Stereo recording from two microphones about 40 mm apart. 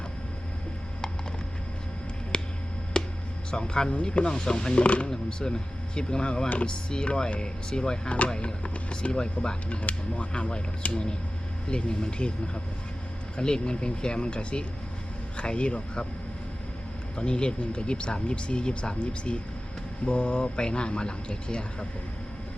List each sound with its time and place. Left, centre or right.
2.3 s a sound: left
2.9 s music: left
3.5 s speech: left
5.1 s speech: centre
13.3 s speech: left
17.2 s speech: left